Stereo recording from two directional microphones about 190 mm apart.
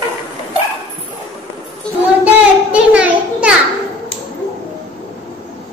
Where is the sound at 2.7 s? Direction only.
5° right (ahead or behind).